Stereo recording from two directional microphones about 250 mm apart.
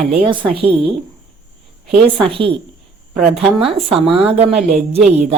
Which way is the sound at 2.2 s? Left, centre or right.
Right.